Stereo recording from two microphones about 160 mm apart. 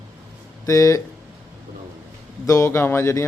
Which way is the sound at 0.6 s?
20° left (ahead or behind).